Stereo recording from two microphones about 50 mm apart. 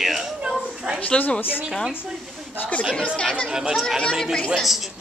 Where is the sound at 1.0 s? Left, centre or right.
Left.